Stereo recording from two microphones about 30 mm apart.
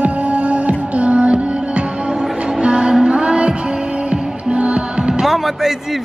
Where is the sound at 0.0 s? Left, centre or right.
Right.